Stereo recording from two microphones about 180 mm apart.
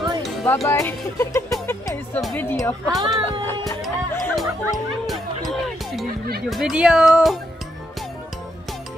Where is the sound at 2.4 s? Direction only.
15° left (ahead or behind).